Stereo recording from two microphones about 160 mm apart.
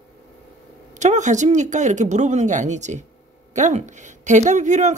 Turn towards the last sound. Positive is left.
turn(degrees=-50)  # may be behind; listen again after turning